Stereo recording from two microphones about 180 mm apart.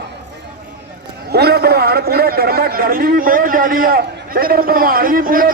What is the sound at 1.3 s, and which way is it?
A man's voice, 60° right (ahead or behind).